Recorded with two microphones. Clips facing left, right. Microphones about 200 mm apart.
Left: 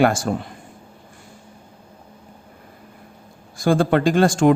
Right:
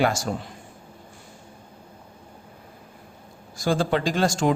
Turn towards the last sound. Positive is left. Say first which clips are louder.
# left 7 dB
turn(degrees=55)  # may be behind; listen again after turning